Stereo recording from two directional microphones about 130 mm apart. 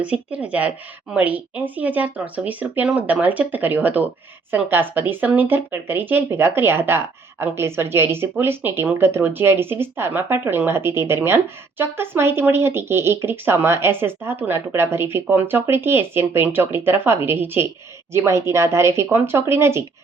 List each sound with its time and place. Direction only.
0.0 s speech: 10° right (ahead or behind)